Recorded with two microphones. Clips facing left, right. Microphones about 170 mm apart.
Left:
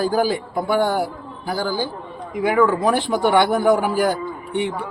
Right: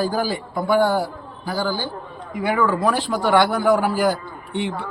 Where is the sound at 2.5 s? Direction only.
20° left (ahead or behind).